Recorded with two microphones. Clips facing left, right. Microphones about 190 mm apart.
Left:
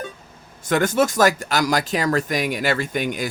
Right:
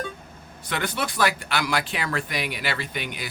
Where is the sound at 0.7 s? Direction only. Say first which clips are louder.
Left 10 dB; 45° left (ahead or behind).